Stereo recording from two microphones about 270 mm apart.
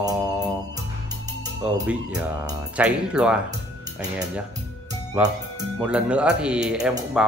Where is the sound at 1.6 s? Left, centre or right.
Centre.